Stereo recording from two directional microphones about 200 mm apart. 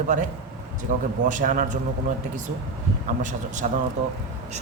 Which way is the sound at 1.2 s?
40° right (ahead or behind).